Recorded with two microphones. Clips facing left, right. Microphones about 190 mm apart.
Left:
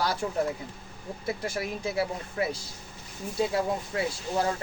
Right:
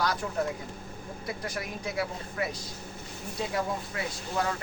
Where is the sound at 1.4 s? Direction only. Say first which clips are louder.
Left 4 dB; 30° left (ahead or behind).